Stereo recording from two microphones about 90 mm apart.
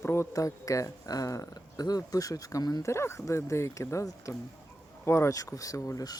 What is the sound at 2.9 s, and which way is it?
Speech, 30° left (ahead or behind).